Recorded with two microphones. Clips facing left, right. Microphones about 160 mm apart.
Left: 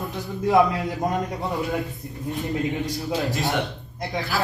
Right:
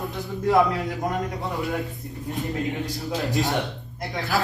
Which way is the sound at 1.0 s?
20° left (ahead or behind).